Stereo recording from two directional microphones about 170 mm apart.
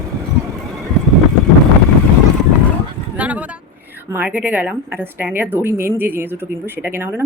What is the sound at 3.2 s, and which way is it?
A woman's voice, 10° right (ahead or behind).